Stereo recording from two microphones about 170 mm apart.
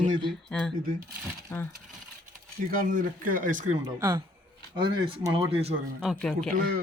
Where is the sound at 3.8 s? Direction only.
25° right (ahead or behind).